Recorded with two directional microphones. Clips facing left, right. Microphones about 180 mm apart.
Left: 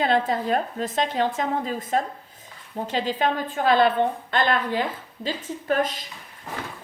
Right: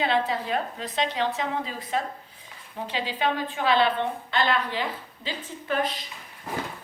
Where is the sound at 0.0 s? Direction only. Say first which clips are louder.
Left 3 dB; 45° left (ahead or behind).